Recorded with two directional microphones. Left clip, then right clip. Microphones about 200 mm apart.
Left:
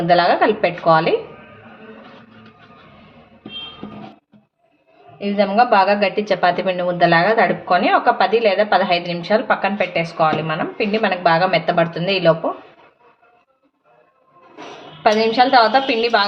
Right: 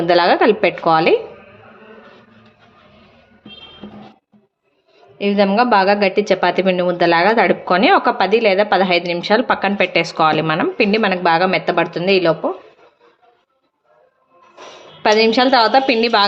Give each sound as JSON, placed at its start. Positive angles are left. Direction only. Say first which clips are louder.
{"t": 0.0, "sound": "a woman's voice", "louder": "right 1 dB", "side_deg": -40}
{"t": 5.1, "sound": "a woman's voice", "louder": "right 1 dB", "side_deg": -55}
{"t": 15.0, "sound": "a woman's voice", "louder": "right 1 dB", "side_deg": -45}